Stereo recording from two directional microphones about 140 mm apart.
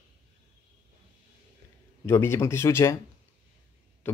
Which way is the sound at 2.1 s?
15° left (ahead or behind).